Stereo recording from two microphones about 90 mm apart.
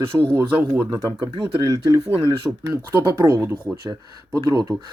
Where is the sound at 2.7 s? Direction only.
25° right (ahead or behind).